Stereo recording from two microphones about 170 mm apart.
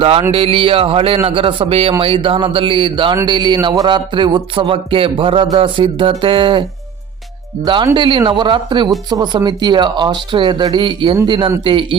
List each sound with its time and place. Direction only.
0.0 s a man's voice: 35° right (ahead or behind)
3.2 s music: 25° right (ahead or behind)